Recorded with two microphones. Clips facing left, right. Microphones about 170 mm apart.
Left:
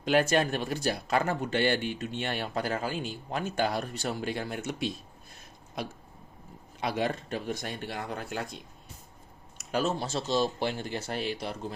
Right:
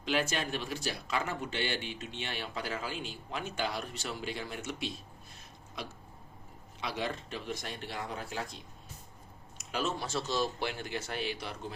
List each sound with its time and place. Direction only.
0.0 s speech: 50° left (ahead or behind)
6.7 s speech: 50° left (ahead or behind)
10.0 s speech: 25° left (ahead or behind)